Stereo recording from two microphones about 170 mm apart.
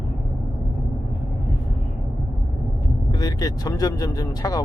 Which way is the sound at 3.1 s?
20° left (ahead or behind).